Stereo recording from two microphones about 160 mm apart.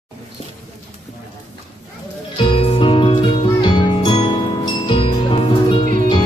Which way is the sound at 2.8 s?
35° left (ahead or behind).